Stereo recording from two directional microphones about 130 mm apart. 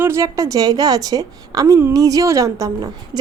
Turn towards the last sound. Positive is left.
turn(degrees=-30)  # may be behind; listen again after turning